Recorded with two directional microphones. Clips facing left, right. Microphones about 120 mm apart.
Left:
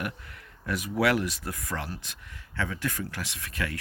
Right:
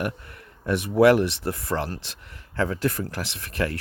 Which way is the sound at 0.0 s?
35° right (ahead or behind).